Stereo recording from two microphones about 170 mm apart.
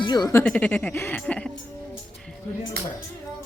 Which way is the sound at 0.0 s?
25° left (ahead or behind).